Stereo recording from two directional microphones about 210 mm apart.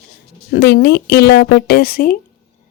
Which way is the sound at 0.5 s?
50° left (ahead or behind).